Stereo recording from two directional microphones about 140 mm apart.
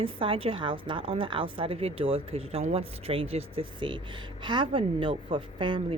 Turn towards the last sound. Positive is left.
turn(degrees=-35)  # may be behind; listen again after turning